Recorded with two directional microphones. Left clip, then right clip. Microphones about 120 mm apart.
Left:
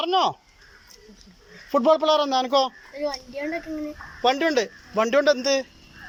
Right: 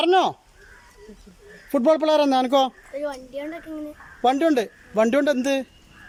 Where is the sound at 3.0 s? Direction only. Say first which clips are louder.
Left 2 dB; 10° right (ahead or behind).